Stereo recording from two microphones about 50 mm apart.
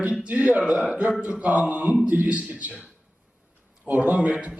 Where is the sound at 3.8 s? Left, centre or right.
Right.